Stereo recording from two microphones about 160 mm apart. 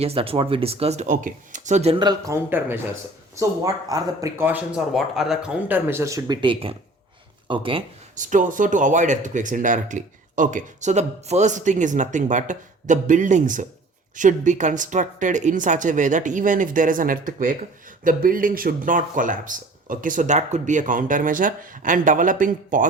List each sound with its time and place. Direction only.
0.0 s speech: 35° right (ahead or behind)
2.3 s speech: 15° right (ahead or behind); by 7.9 s 35° right (ahead or behind)
8.1 s speech: 55° right (ahead or behind)